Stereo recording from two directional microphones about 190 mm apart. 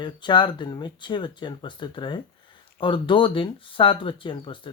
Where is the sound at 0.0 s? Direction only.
25° left (ahead or behind).